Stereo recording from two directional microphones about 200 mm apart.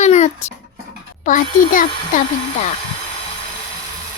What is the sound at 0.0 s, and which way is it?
Dog, 35° left (ahead or behind).